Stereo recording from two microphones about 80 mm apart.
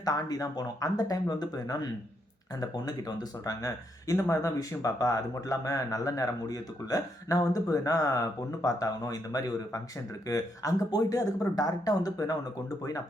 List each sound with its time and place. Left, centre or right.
0.0 s speech: left